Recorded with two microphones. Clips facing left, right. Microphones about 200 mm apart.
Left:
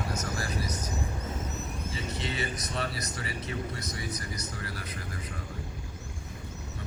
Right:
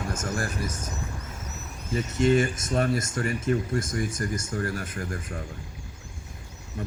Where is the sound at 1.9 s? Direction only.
50° right (ahead or behind).